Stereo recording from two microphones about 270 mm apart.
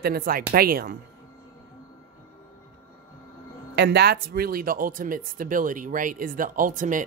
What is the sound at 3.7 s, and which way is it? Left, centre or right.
Speech, right.